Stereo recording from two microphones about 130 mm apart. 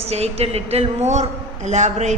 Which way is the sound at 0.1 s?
55° right (ahead or behind).